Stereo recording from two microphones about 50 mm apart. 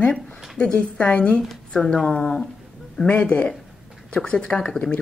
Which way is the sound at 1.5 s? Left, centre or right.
Centre.